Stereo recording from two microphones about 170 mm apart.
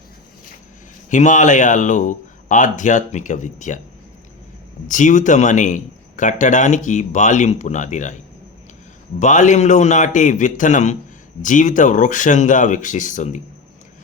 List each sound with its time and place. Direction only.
1.1 s a man's voice: 45° left (ahead or behind)
4.9 s a man's voice: 45° left (ahead or behind)
9.1 s a man's voice: 45° left (ahead or behind)